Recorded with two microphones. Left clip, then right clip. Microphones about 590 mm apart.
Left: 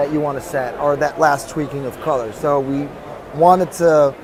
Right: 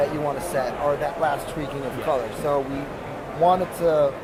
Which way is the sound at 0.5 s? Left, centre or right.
Left.